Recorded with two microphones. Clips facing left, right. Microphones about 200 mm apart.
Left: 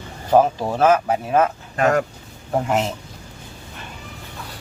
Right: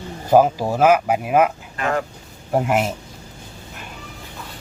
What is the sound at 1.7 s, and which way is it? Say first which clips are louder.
Speech: left 5 dB; 45° left (ahead or behind).